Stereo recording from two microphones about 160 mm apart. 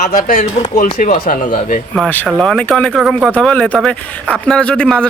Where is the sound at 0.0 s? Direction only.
50° left (ahead or behind).